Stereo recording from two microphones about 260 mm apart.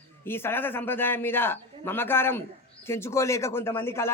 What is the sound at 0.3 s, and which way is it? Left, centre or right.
A man's voice, centre.